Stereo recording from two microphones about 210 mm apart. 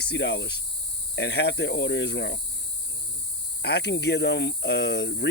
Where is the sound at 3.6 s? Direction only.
50° left (ahead or behind).